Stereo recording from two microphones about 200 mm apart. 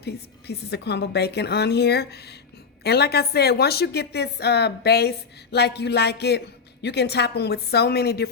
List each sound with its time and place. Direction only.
0.0 s a woman's voice: 55° left (ahead or behind)